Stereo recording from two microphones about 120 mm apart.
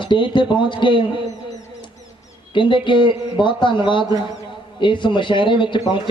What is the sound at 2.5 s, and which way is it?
A man's voice, 40° left (ahead or behind).